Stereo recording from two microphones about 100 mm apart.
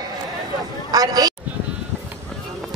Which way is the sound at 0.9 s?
40° right (ahead or behind).